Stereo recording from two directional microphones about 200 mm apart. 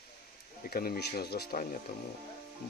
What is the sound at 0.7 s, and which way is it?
Speech, 50° left (ahead or behind).